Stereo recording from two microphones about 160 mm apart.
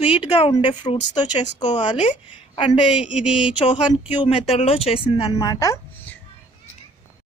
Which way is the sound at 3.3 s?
30° left (ahead or behind).